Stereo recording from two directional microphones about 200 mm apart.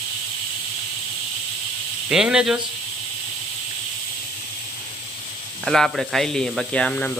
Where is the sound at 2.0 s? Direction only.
5° right (ahead or behind).